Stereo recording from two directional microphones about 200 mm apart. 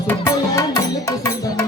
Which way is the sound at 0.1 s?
15° left (ahead or behind).